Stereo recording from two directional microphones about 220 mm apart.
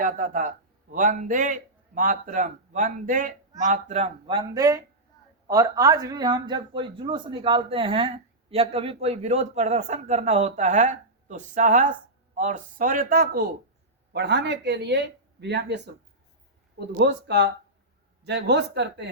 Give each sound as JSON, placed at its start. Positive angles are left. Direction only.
{"t": 0.0, "sound": "speech", "side_deg": -35}
{"t": 17.0, "sound": "speech", "side_deg": -50}